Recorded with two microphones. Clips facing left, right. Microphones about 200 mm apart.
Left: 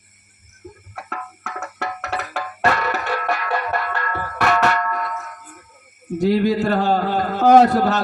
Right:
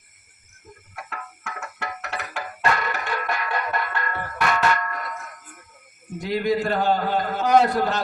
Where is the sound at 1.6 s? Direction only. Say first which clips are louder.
Left 6 dB; 40° left (ahead or behind).